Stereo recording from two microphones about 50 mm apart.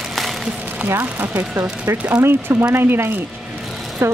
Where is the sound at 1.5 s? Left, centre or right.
Right.